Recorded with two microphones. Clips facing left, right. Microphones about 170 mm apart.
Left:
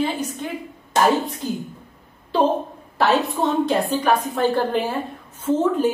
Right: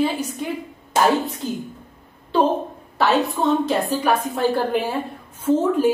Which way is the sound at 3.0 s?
Centre (ahead or behind).